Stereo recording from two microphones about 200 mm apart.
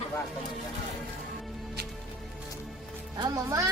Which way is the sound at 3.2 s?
15° right (ahead or behind).